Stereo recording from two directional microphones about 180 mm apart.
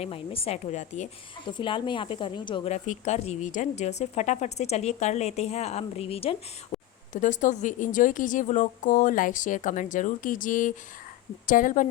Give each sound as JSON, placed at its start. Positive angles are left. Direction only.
{"t": 0.0, "sound": "speech", "side_deg": 35}
{"t": 1.5, "sound": "speech", "side_deg": 25}
{"t": 2.7, "sound": "speech", "side_deg": 40}
{"t": 7.1, "sound": "a woman's voice", "side_deg": 45}